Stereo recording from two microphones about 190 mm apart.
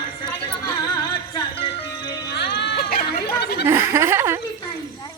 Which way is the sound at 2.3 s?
60° left (ahead or behind).